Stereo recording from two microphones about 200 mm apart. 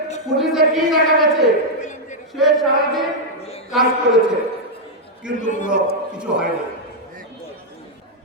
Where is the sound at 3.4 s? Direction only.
30° left (ahead or behind).